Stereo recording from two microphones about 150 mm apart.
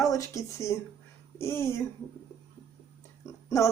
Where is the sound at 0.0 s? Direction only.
20° left (ahead or behind).